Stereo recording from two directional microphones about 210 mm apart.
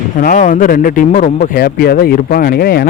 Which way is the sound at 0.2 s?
40° left (ahead or behind).